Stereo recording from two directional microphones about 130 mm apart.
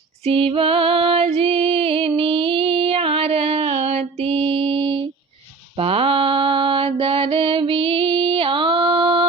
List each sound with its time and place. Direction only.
0.3 s music: 45° right (ahead or behind)
5.7 s mantra: 45° right (ahead or behind)